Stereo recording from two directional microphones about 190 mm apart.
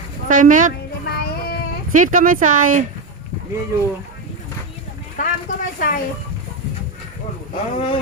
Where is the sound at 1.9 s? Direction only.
45° right (ahead or behind).